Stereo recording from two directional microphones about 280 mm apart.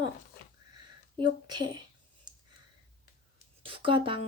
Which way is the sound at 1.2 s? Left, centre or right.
Centre.